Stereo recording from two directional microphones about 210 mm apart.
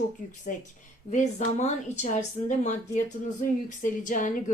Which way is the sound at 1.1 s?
35° left (ahead or behind).